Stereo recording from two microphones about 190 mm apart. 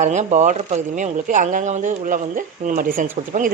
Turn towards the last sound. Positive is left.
turn(degrees=-40)  # may be behind; listen again after turning